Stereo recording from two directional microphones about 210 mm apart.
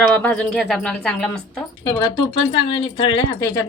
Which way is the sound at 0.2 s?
5° left (ahead or behind).